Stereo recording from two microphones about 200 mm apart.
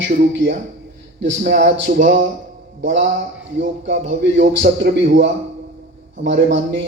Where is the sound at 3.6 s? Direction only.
65° right (ahead or behind).